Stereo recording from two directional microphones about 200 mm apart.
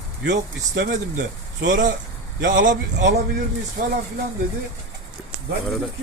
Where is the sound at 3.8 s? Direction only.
45° right (ahead or behind).